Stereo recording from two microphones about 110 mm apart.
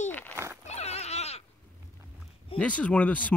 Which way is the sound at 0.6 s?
75° left (ahead or behind).